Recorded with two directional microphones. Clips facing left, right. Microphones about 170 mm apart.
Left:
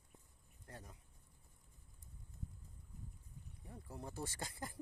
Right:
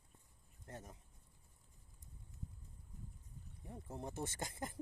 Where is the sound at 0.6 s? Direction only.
25° right (ahead or behind).